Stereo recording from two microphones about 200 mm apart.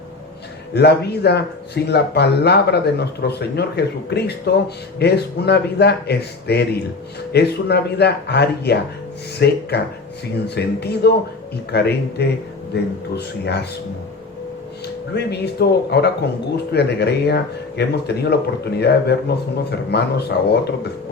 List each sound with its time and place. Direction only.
0.7 s speech: 55° left (ahead or behind)
15.1 s speech: 55° left (ahead or behind)